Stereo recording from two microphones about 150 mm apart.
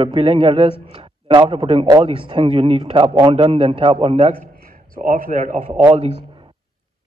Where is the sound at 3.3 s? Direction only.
40° right (ahead or behind).